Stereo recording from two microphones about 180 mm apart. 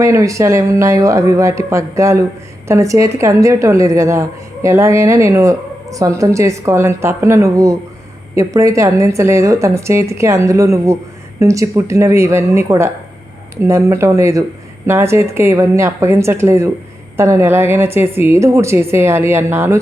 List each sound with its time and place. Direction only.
0.0 s speech: 15° right (ahead or behind)